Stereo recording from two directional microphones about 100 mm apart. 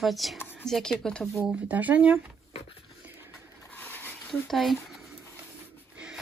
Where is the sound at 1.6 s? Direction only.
15° right (ahead or behind).